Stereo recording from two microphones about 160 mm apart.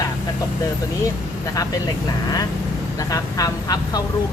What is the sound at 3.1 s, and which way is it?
Speech, 20° left (ahead or behind).